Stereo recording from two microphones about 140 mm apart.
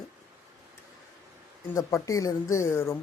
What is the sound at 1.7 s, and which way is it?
Speech, 25° left (ahead or behind).